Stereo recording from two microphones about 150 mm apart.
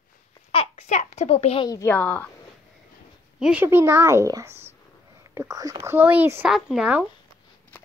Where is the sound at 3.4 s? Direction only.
10° right (ahead or behind).